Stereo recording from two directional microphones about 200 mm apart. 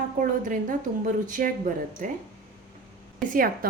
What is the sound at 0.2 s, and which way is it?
Speech, 40° right (ahead or behind).